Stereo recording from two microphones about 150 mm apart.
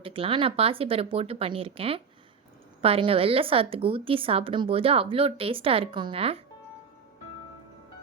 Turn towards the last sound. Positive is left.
turn(degrees=-40)  # may be behind; listen again after turning